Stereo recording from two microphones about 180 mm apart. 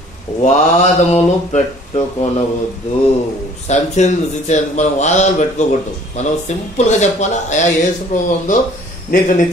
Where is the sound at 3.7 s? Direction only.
40° left (ahead or behind).